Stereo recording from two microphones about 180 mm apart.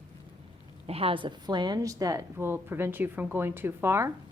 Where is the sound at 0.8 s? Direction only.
35° right (ahead or behind).